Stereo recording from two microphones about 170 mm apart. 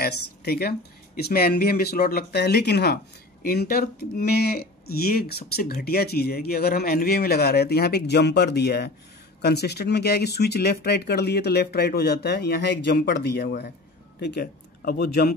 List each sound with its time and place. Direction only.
0.0 s speech: 65° left (ahead or behind)
3.4 s speech: 60° left (ahead or behind)